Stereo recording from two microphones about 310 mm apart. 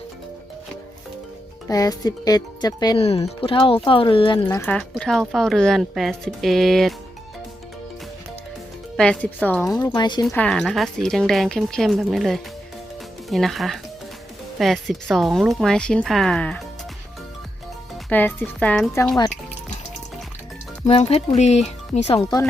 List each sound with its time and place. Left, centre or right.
1.6 s a woman's voice: centre
9.0 s a woman's voice: centre
10.2 s a woman's voice: centre
18.1 s a woman's voice: centre
20.8 s speech: centre